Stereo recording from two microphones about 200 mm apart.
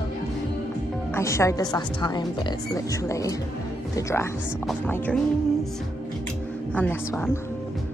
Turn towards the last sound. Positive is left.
turn(degrees=5)  # may be behind; listen again after turning